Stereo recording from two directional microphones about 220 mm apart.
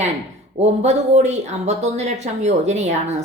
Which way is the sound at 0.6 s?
30° right (ahead or behind).